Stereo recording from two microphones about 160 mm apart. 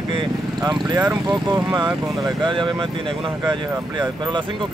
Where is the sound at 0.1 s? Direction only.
30° right (ahead or behind).